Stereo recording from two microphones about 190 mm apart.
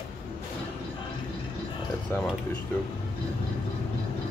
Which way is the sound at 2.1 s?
10° left (ahead or behind).